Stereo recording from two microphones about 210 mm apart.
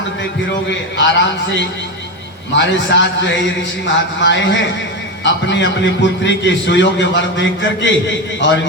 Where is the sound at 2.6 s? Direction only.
60° left (ahead or behind).